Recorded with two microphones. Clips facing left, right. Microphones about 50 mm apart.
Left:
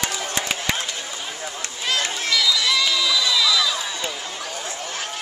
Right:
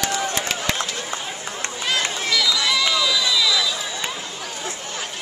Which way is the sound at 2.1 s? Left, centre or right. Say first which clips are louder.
Even; centre.